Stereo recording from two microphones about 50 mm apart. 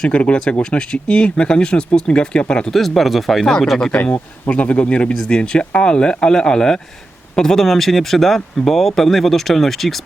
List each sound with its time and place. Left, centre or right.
0.0 s speech: left
2.7 s speech: centre
3.4 s speech: centre
4.4 s speech: left; by 10.0 s centre